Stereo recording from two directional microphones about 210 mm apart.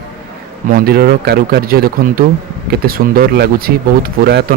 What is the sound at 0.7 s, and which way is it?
Speech, 45° right (ahead or behind).